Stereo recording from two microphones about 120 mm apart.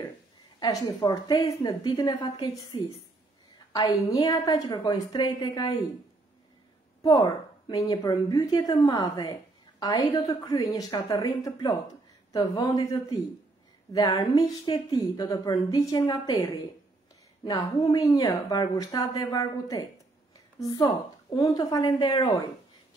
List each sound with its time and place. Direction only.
0.6 s a woman's voice: 35° left (ahead or behind)
7.0 s a woman's voice: 30° left (ahead or behind)